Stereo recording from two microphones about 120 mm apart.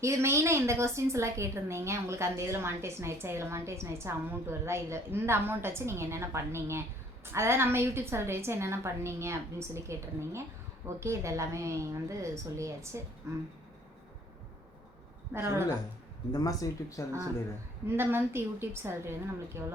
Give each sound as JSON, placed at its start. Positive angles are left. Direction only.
{"t": 0.0, "sound": "a woman's voice", "side_deg": -20}
{"t": 15.3, "sound": "a woman's voice", "side_deg": -20}
{"t": 16.3, "sound": "speech", "side_deg": 30}
{"t": 17.8, "sound": "a woman's voice", "side_deg": -20}